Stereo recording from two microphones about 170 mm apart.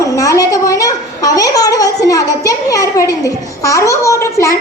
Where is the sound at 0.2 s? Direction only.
20° left (ahead or behind).